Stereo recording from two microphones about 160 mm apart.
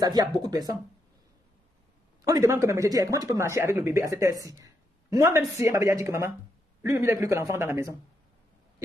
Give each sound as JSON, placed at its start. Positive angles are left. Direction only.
{"t": 0.0, "sound": "speech", "side_deg": -25}
{"t": 2.2, "sound": "speech", "side_deg": -20}